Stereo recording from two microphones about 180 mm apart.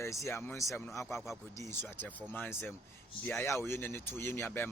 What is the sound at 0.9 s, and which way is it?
A man's voice, centre (ahead or behind).